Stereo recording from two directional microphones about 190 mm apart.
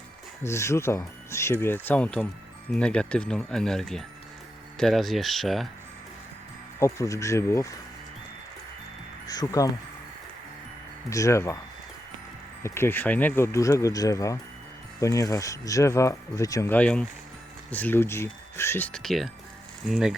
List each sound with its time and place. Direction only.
0.4 s speech: 15° left (ahead or behind)
6.7 s speech: 15° left (ahead or behind)
9.2 s speech: 20° left (ahead or behind)
11.1 s speech: 15° left (ahead or behind)
12.6 s speech: 15° left (ahead or behind); by 20.1 s 5° right (ahead or behind)